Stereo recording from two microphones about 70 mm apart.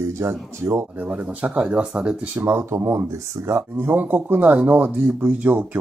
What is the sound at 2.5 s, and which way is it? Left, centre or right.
Speech, right.